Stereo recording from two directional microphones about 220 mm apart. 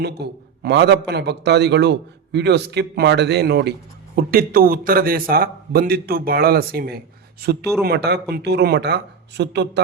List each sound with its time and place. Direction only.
0.0 s a man's voice: 50° right (ahead or behind)